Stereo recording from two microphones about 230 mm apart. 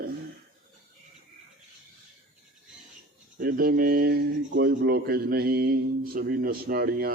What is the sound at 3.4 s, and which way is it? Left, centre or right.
Speech, right.